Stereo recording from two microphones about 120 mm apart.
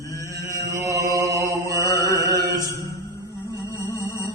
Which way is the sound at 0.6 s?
25° right (ahead or behind).